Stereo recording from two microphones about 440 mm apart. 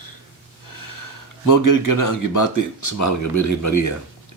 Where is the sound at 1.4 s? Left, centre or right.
Left.